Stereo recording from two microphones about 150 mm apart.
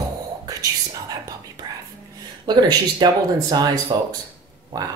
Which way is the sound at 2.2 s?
30° right (ahead or behind).